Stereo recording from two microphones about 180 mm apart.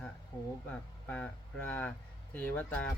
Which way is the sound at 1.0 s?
10° left (ahead or behind).